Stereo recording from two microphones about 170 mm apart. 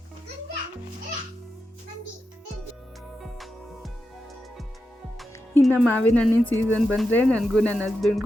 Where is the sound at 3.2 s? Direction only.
Centre (ahead or behind).